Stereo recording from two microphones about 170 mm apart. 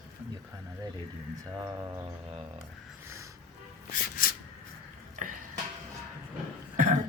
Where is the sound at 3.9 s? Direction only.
55° left (ahead or behind).